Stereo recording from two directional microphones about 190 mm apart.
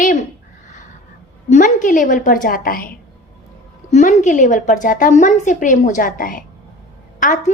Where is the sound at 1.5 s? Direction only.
40° left (ahead or behind).